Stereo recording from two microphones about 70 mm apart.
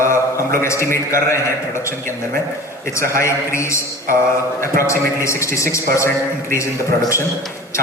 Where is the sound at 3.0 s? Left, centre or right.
Left.